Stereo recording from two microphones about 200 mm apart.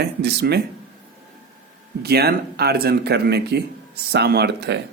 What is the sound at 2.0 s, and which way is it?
Speech, 50° right (ahead or behind).